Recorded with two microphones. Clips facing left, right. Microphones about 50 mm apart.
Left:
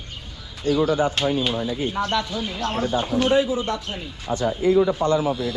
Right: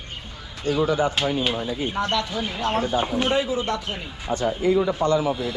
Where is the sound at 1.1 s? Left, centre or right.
Centre.